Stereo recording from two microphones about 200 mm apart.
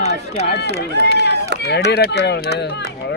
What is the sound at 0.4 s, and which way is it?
Speech, 50° left (ahead or behind).